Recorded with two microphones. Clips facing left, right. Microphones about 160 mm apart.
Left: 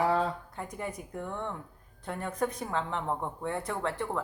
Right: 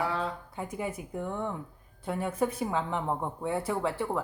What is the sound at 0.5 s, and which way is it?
A woman's voice, 5° right (ahead or behind).